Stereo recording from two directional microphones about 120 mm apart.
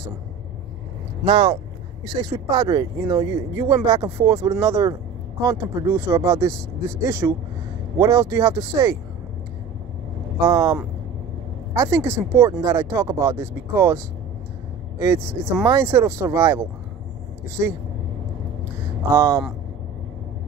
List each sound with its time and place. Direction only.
1.2 s speech: 45° right (ahead or behind)
2.1 s speech: 35° right (ahead or behind)
10.4 s speech: 30° right (ahead or behind)
19.0 s speech: 25° right (ahead or behind)